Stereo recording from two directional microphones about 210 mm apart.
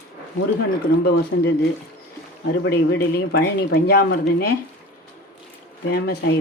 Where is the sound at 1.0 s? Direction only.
50° left (ahead or behind).